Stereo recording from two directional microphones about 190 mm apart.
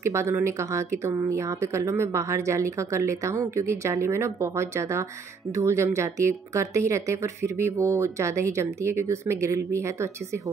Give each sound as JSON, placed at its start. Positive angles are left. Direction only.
{"t": 0.0, "sound": "speech", "side_deg": -15}